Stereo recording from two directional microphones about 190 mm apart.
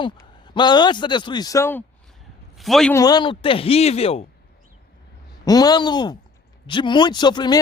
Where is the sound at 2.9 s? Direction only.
20° left (ahead or behind).